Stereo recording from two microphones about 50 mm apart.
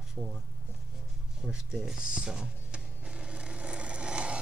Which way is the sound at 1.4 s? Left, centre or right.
Centre.